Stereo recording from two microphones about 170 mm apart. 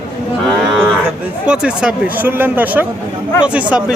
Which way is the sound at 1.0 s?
5° right (ahead or behind).